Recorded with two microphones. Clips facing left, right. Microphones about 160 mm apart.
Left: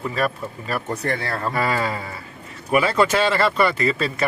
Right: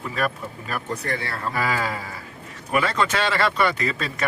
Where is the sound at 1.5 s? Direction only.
Centre (ahead or behind).